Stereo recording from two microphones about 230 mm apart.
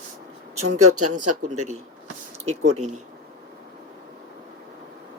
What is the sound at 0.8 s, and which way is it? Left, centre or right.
Speech, right.